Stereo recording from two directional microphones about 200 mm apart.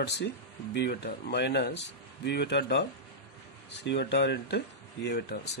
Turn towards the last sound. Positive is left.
turn(degrees=55)  # may be behind; listen again after turning